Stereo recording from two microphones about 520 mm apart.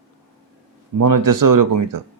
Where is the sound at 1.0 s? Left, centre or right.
Right.